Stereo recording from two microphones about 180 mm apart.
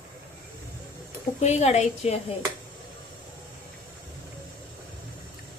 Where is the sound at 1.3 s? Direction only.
40° left (ahead or behind).